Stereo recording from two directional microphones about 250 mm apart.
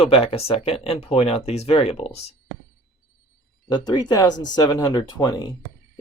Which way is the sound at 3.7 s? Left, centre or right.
Centre.